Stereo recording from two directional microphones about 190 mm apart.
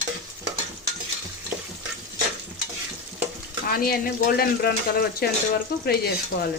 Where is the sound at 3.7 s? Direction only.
50° left (ahead or behind).